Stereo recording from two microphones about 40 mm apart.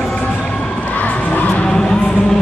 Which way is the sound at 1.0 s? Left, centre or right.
Left.